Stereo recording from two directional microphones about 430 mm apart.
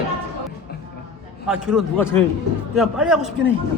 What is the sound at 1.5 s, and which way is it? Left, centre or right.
A man's voice, centre.